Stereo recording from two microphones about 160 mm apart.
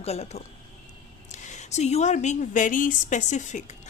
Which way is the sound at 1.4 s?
45° left (ahead or behind).